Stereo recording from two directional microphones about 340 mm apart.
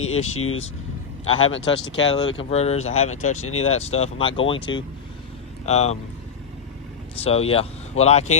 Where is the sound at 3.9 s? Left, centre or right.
Centre.